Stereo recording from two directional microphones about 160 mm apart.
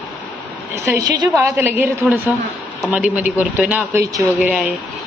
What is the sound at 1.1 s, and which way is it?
Speech, 25° right (ahead or behind).